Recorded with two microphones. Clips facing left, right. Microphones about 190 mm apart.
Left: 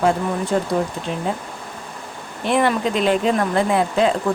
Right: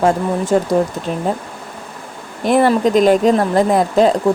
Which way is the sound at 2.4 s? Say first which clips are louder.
Right 6 dB; 40° right (ahead or behind).